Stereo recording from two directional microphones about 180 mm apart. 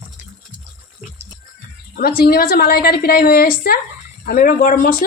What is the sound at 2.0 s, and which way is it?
A woman's voice, 55° left (ahead or behind).